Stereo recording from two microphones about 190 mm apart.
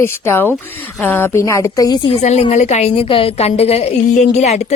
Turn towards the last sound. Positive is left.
turn(degrees=35)  # may be behind; listen again after turning